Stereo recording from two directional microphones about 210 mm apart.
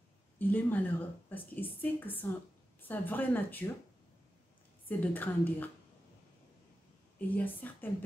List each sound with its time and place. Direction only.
0.4 s a woman's voice: 10° left (ahead or behind)
4.8 s a woman's voice: 10° left (ahead or behind)
7.2 s a woman's voice: 10° left (ahead or behind)